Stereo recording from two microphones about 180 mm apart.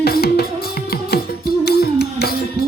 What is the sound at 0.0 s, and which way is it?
Music, 60° left (ahead or behind).